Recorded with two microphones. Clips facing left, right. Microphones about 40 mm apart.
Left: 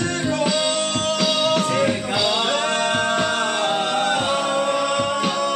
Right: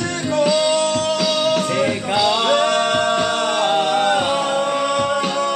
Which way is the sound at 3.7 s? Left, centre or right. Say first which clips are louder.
Right 4 dB; right.